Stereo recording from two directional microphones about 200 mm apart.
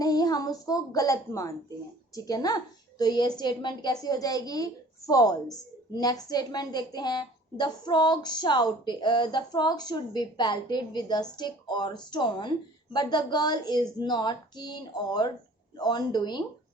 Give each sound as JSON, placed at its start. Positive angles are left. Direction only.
{"t": 0.0, "sound": "a woman's voice", "side_deg": 20}